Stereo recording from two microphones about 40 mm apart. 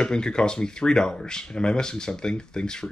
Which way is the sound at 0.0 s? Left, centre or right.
Left.